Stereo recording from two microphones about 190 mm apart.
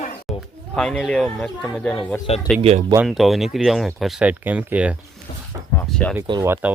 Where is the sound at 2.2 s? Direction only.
25° left (ahead or behind).